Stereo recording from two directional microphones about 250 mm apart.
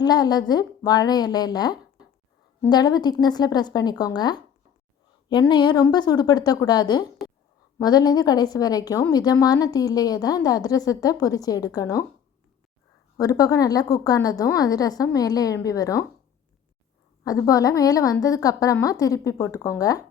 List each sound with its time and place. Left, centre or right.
0.0 s a woman's voice: centre
13.1 s a woman's voice: centre
17.2 s a woman's voice: centre